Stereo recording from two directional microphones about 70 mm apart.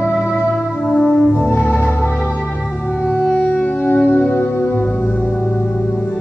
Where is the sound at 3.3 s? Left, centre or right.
Left.